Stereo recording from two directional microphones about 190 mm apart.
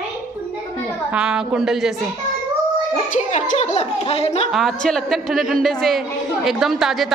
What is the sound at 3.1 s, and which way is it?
A woman's voice, 35° left (ahead or behind).